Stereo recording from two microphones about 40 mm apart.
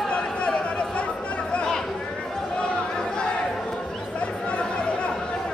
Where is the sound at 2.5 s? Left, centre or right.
Centre.